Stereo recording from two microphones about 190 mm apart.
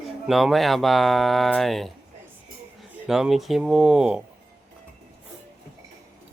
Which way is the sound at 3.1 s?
Centre (ahead or behind).